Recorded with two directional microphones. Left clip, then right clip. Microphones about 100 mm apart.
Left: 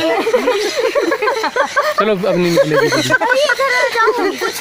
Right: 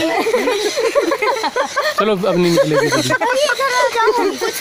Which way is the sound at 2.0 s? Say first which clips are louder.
Right 1 dB; 15° right (ahead or behind).